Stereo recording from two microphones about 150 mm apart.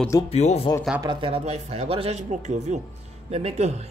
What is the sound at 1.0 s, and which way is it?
Speech, 35° right (ahead or behind).